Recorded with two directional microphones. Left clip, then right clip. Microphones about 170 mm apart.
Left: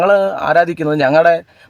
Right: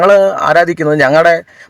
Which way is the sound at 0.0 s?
30° right (ahead or behind).